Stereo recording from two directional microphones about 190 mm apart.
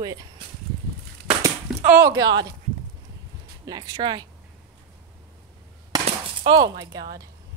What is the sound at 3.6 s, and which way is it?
Speech, 20° right (ahead or behind).